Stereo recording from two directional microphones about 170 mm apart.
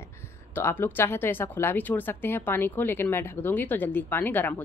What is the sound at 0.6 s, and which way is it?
Speech, 10° left (ahead or behind).